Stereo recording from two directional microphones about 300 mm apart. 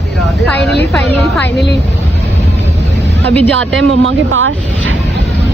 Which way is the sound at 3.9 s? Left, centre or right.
Right.